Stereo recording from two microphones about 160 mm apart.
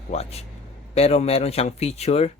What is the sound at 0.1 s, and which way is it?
Speech, 40° left (ahead or behind).